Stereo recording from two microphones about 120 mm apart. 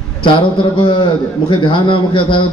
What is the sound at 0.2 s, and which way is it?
A man's voice, 45° left (ahead or behind).